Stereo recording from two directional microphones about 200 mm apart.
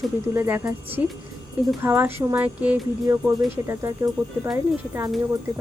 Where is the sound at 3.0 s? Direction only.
20° right (ahead or behind).